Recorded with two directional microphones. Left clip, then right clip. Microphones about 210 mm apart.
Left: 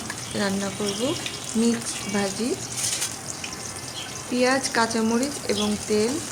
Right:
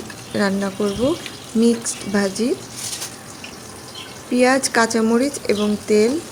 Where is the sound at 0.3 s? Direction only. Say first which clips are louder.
Right 6 dB; 30° right (ahead or behind).